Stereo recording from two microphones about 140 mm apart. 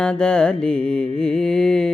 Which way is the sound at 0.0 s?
5° left (ahead or behind).